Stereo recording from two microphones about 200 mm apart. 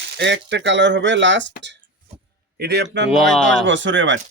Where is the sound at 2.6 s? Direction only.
55° right (ahead or behind).